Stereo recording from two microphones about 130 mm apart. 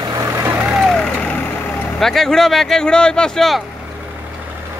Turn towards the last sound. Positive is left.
turn(degrees=5)  # may be behind; listen again after turning